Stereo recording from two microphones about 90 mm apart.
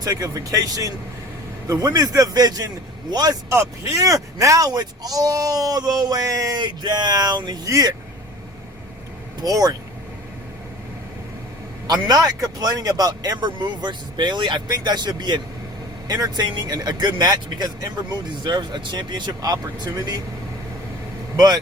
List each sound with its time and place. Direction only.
0.0 s speech: 40° right (ahead or behind)
3.5 s speech: 35° right (ahead or behind)
9.4 s speech: 45° right (ahead or behind)
11.9 s speech: 45° right (ahead or behind)
21.3 s speech: 45° right (ahead or behind)